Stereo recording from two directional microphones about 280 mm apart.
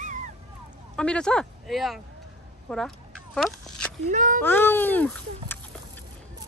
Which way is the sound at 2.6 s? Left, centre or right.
Centre.